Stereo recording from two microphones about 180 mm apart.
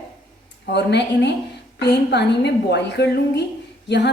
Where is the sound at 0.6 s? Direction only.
70° left (ahead or behind).